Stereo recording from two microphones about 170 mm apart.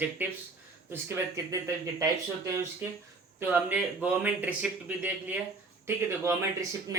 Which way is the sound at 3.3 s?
10° right (ahead or behind).